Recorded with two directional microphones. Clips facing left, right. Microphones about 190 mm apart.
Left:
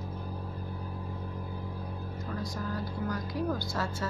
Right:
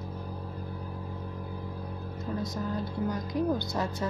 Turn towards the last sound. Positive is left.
turn(degrees=-20)  # may be behind; listen again after turning